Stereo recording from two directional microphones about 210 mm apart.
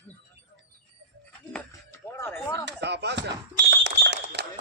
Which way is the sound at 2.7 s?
55° right (ahead or behind).